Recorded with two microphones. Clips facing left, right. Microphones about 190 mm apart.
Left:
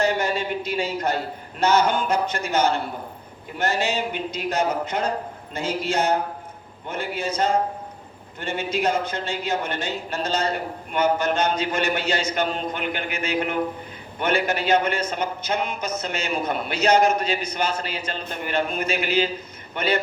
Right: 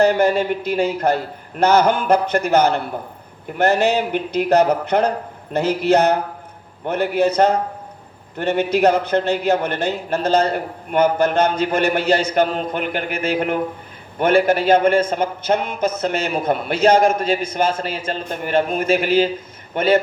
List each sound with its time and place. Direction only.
0.0 s a man's voice: 55° right (ahead or behind)